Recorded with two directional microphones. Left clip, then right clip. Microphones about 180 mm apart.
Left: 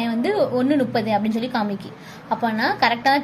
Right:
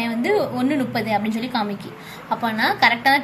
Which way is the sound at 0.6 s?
50° left (ahead or behind).